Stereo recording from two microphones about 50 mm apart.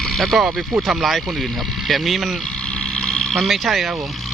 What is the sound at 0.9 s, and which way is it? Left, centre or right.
Speech, centre.